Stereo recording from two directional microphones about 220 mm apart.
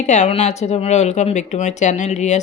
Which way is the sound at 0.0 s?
35° left (ahead or behind).